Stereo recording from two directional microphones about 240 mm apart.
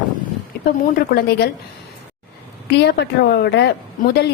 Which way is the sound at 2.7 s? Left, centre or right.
Left.